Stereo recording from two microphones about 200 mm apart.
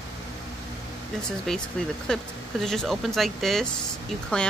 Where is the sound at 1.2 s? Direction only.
5° left (ahead or behind).